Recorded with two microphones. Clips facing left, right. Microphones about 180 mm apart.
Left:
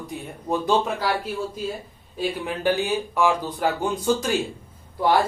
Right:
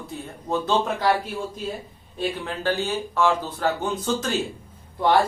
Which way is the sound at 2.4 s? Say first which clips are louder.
Left 5 dB; 15° left (ahead or behind).